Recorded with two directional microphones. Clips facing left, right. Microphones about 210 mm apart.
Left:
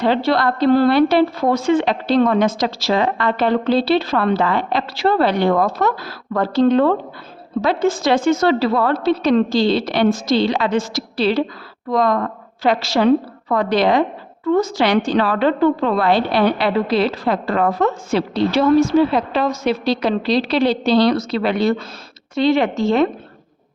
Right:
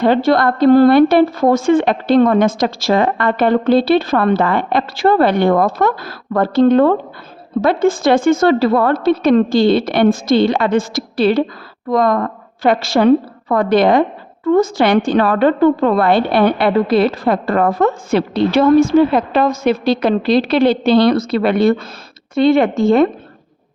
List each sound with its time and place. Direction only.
0.0 s a woman's voice: 50° right (ahead or behind)